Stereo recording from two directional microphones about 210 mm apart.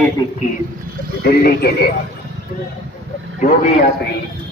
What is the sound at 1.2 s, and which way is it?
Speech, 45° left (ahead or behind).